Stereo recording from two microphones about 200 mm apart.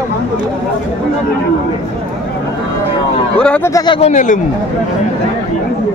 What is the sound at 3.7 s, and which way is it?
Speech, 25° left (ahead or behind).